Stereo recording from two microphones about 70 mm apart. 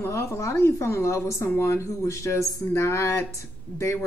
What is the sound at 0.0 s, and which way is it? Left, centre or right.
Speech, left.